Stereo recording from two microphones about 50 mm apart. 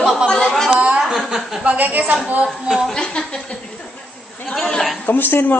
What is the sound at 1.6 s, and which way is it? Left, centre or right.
Speech, right.